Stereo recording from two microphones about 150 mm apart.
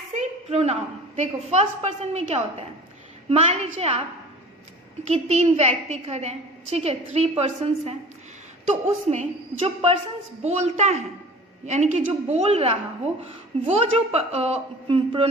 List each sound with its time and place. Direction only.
0.2 s a woman's voice: 45° right (ahead or behind)
5.0 s a woman's voice: 45° right (ahead or behind)